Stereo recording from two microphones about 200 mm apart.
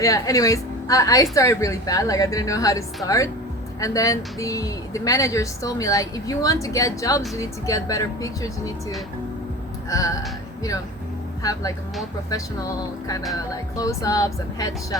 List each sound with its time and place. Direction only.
0.0 s speech: 15° left (ahead or behind)
13.7 s speech: 15° left (ahead or behind)